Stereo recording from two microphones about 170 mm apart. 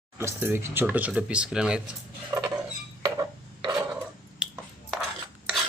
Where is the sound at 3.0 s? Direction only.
20° right (ahead or behind).